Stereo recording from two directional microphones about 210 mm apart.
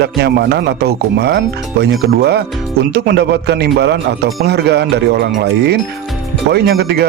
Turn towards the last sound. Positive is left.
turn(degrees=-50)  # may be behind; listen again after turning